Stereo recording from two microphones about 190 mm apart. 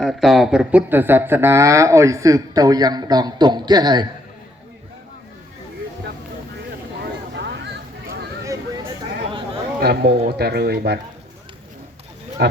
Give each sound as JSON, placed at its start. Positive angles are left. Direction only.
{"t": 0.0, "sound": "speech", "side_deg": 0}
{"t": 7.3, "sound": "a sound", "side_deg": -65}
{"t": 9.8, "sound": "speech", "side_deg": -55}
{"t": 12.4, "sound": "speech", "side_deg": -60}